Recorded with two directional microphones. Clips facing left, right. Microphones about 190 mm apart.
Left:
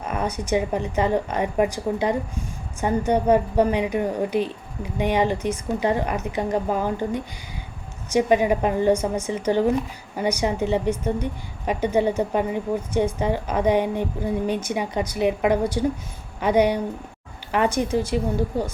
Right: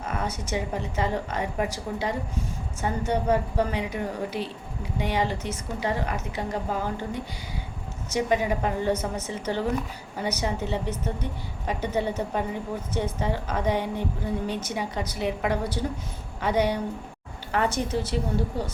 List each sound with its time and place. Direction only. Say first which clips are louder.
0.0 s a woman's voice: left 4 dB; 15° left (ahead or behind)